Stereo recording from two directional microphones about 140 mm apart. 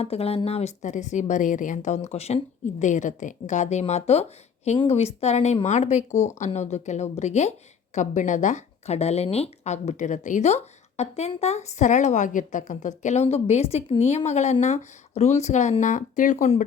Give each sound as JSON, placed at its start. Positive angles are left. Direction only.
{"t": 0.0, "sound": "speech", "side_deg": 45}